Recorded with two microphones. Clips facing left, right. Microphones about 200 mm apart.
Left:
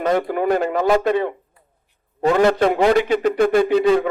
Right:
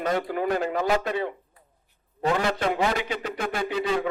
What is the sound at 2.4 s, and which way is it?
A man's voice, 60° left (ahead or behind).